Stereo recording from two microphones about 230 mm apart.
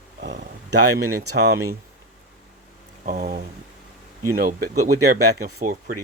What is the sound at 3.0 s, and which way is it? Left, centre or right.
Speech, right.